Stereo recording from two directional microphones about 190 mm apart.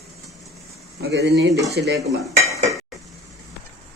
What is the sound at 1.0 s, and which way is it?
Speech, 60° right (ahead or behind).